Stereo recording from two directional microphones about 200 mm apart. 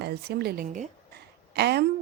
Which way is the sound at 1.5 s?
55° right (ahead or behind).